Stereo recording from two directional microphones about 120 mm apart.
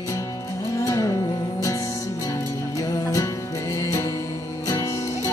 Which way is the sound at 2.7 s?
30° left (ahead or behind).